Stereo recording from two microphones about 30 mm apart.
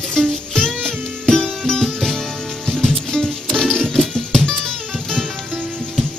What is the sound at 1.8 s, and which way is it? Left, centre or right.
Music, centre.